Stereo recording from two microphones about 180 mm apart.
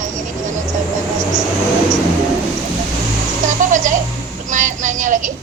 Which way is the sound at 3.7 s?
45° right (ahead or behind).